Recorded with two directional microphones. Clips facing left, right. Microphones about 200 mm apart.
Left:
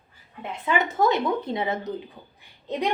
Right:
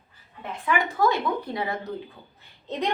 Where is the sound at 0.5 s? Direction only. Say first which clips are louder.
Left 1 dB; 20° left (ahead or behind).